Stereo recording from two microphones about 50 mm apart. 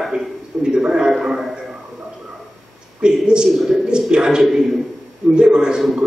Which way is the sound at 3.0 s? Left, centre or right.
Centre.